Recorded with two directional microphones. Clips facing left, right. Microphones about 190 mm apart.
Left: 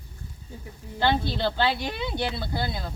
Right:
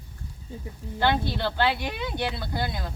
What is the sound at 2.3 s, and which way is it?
Speech, 10° left (ahead or behind).